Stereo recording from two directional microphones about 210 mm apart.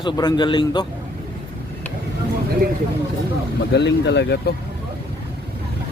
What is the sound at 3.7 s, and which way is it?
Speech, 55° left (ahead or behind).